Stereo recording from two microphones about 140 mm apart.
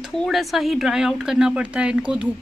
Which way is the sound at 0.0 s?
Centre (ahead or behind).